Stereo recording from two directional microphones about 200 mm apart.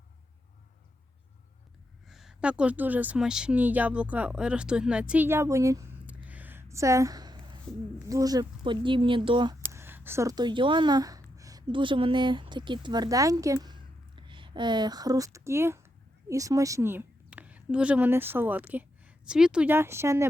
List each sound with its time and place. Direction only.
2.0 s speech: centre (ahead or behind); by 9.6 s 20° right (ahead or behind)
9.6 s a woman's voice: 10° right (ahead or behind)